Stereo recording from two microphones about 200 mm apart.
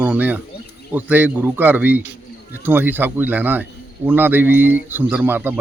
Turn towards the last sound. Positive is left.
turn(degrees=-10)  # may be behind; listen again after turning